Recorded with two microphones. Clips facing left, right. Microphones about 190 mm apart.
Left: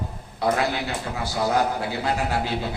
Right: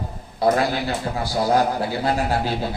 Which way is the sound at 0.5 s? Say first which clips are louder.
Right 3 dB; 40° right (ahead or behind).